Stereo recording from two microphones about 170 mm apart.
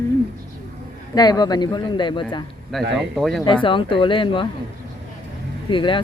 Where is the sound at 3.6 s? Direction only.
30° left (ahead or behind).